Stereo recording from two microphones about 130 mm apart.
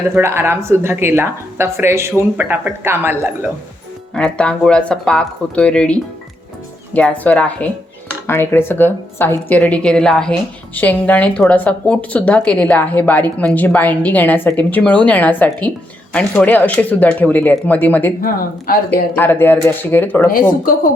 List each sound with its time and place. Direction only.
0.1 s a woman's voice: 20° right (ahead or behind)
4.1 s speech: 5° left (ahead or behind)